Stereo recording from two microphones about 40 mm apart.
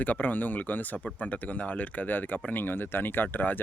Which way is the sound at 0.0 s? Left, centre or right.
Left.